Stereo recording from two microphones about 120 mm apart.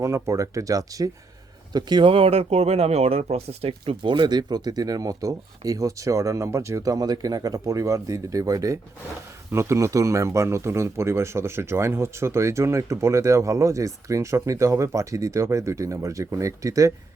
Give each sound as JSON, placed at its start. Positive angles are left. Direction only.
{"t": 0.0, "sound": "speech", "side_deg": -25}